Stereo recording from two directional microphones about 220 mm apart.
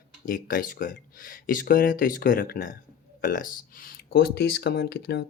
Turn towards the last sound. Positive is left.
turn(degrees=45)  # may be behind; listen again after turning